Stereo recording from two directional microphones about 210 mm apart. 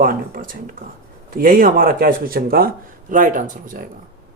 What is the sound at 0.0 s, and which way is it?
Speech, 40° right (ahead or behind).